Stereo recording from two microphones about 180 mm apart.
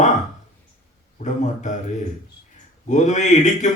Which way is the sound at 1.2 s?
40° left (ahead or behind).